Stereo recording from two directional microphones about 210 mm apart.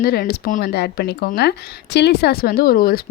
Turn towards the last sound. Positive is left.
turn(degrees=45)  # may be behind; listen again after turning